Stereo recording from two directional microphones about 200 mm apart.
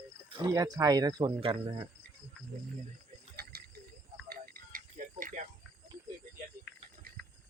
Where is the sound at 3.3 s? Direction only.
50° right (ahead or behind).